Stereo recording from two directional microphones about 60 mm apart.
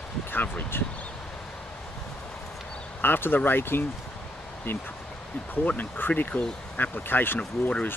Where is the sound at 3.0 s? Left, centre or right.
Left.